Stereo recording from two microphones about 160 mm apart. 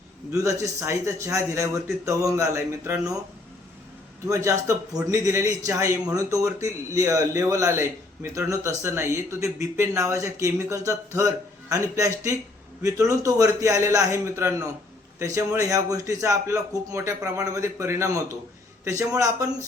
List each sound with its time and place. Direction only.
0.3 s a man's voice: 20° right (ahead or behind)
4.3 s a man's voice: 20° right (ahead or behind)